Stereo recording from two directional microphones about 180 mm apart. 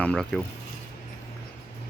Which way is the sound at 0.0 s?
5° left (ahead or behind).